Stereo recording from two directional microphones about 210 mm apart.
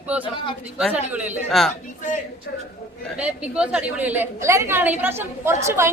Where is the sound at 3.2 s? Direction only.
5° right (ahead or behind).